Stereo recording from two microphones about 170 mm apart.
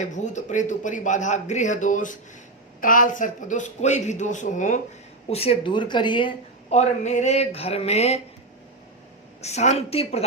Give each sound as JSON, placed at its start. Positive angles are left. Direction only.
{"t": 0.0, "sound": "speech", "side_deg": 45}
{"t": 5.3, "sound": "speech", "side_deg": 35}
{"t": 9.4, "sound": "speech", "side_deg": 40}